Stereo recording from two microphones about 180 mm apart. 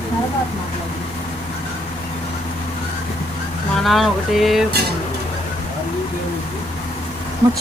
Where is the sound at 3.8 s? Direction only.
Centre (ahead or behind).